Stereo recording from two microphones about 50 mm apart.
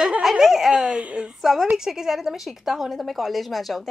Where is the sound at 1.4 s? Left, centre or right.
Centre.